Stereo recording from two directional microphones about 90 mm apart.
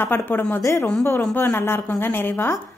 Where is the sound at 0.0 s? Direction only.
25° left (ahead or behind).